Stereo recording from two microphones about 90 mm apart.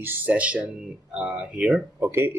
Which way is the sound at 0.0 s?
20° right (ahead or behind).